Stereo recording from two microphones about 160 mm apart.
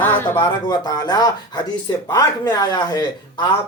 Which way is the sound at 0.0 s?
15° left (ahead or behind).